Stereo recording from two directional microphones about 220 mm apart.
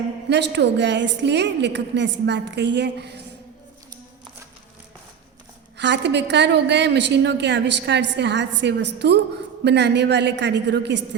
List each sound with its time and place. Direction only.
0.3 s a woman's voice: 50° right (ahead or behind)
5.7 s a woman's voice: 50° right (ahead or behind)